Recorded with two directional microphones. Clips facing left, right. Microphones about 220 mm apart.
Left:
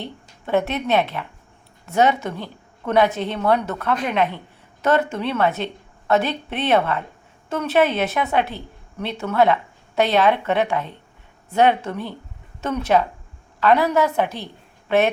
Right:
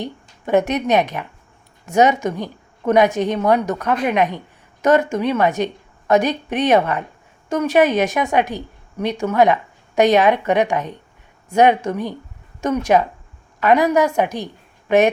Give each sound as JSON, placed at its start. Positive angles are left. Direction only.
{"t": 0.0, "sound": "a woman's voice", "side_deg": -15}